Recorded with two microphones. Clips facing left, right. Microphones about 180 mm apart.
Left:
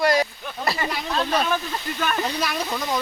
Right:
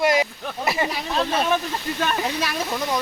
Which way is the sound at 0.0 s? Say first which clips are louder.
Even; 20° right (ahead or behind).